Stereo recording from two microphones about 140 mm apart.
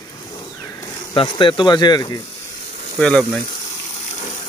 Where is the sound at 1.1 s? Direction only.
40° left (ahead or behind).